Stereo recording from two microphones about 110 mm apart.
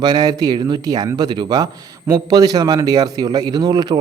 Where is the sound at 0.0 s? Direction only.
40° right (ahead or behind).